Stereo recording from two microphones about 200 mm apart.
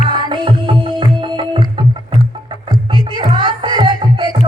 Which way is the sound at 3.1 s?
25° right (ahead or behind).